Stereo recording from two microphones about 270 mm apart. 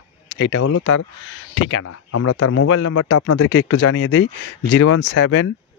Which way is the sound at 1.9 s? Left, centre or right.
Left.